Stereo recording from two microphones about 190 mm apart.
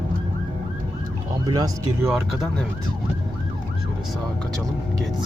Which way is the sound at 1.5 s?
20° right (ahead or behind).